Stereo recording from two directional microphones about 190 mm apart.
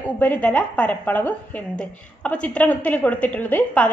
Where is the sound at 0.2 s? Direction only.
10° left (ahead or behind).